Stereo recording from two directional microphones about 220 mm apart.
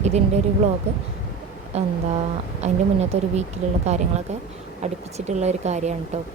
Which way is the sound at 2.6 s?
30° right (ahead or behind).